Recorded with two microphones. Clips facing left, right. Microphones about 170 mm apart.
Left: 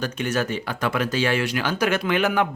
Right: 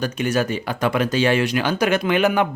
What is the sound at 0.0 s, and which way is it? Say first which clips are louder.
Speech: right 3 dB; 10° right (ahead or behind).